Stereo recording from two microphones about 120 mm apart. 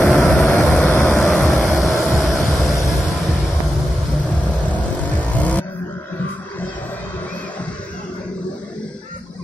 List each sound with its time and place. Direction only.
0.0 s vehicle: 15° left (ahead or behind)
1.5 s vehicle: centre (ahead or behind)
4.6 s vehicle: 10° left (ahead or behind)